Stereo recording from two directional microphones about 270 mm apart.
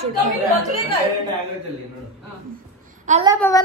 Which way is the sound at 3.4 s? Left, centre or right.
Centre.